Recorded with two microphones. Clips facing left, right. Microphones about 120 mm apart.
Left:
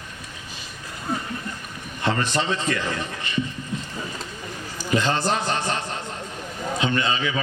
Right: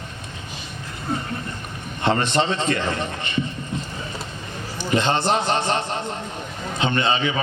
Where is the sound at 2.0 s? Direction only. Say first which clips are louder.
Right 3 dB; 25° right (ahead or behind).